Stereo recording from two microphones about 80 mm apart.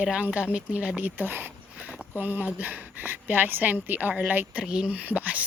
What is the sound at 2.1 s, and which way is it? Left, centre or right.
Speech, right.